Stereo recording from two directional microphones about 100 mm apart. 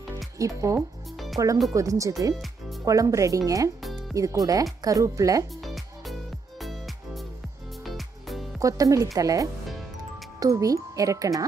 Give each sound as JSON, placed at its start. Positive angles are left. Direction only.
{"t": 0.4, "sound": "speech", "side_deg": -35}
{"t": 1.1, "sound": "music", "side_deg": 0}
{"t": 1.7, "sound": "speech", "side_deg": -35}
{"t": 2.3, "sound": "music", "side_deg": 0}
{"t": 2.8, "sound": "speech", "side_deg": -35}
{"t": 5.6, "sound": "music", "side_deg": 0}
{"t": 8.5, "sound": "speech", "side_deg": -35}